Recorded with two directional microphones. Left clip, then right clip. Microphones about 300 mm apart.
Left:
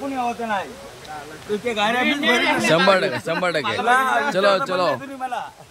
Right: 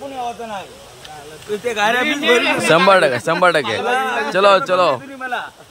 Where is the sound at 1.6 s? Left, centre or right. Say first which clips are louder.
Right 4 dB; centre.